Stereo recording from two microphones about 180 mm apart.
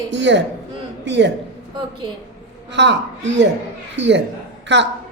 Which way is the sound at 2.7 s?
75° right (ahead or behind).